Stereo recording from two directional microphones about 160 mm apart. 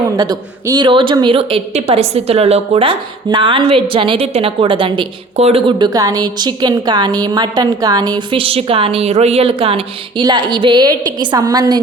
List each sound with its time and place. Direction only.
0.2 s a woman's voice: 25° right (ahead or behind)